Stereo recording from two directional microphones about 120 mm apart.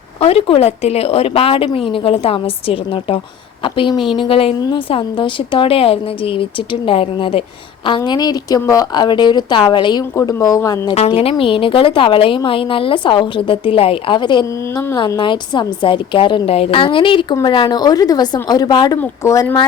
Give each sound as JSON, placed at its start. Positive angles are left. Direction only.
{"t": 0.2, "sound": "a woman's voice", "side_deg": 55}
{"t": 7.9, "sound": "a woman's voice", "side_deg": 40}
{"t": 10.2, "sound": "a woman's voice", "side_deg": 25}
{"t": 10.8, "sound": "speech", "side_deg": 65}
{"t": 11.1, "sound": "a woman's voice", "side_deg": 50}